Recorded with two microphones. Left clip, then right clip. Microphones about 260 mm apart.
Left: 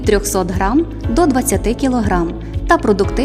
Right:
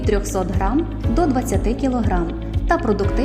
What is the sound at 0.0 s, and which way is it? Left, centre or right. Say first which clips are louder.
Speech: left 6 dB; left.